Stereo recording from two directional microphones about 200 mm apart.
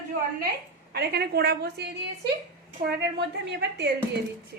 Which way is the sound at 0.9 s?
55° right (ahead or behind).